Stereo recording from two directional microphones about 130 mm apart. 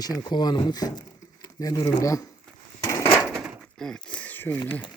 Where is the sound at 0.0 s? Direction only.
30° left (ahead or behind).